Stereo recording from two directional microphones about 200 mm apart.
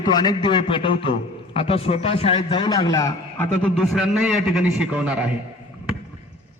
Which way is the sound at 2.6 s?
20° left (ahead or behind).